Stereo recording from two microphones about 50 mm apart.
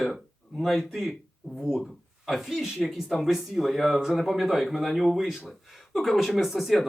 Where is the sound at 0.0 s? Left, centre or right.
Centre.